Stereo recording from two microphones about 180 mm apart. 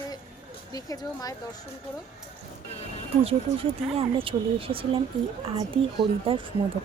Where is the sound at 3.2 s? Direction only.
30° right (ahead or behind).